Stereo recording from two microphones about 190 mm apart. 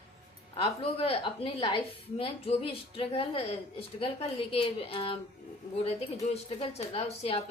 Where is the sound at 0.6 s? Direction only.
30° left (ahead or behind).